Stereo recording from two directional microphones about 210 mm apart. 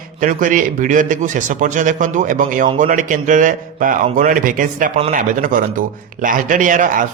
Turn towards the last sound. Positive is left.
turn(degrees=-40)  # may be behind; listen again after turning